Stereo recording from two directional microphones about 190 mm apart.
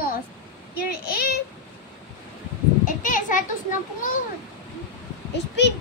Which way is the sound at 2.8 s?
45° left (ahead or behind).